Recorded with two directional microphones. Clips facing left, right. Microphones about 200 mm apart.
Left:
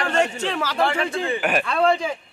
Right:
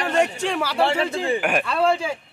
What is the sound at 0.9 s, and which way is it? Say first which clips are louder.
Speech: right 2 dB; 25° right (ahead or behind).